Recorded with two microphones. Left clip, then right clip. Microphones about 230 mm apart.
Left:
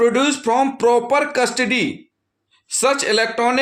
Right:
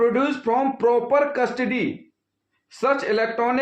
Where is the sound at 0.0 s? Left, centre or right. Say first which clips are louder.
Left 4 dB; left.